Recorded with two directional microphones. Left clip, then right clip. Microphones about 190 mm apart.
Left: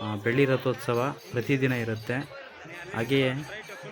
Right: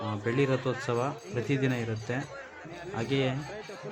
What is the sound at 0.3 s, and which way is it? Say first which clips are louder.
Speech: left 4 dB; 15° left (ahead or behind).